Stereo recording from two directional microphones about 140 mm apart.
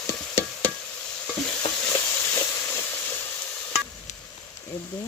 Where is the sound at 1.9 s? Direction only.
20° left (ahead or behind).